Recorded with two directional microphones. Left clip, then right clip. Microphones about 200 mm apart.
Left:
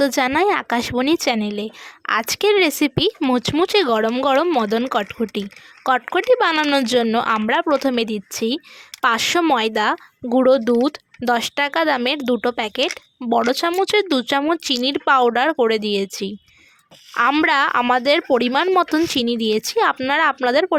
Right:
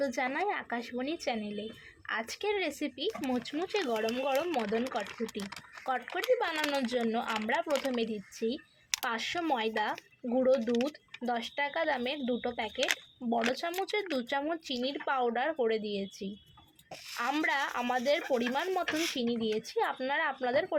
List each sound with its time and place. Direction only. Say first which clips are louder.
0.0 s speech: left 15 dB; 50° left (ahead or behind)
5.8 s speech: left 15 dB; 50° left (ahead or behind)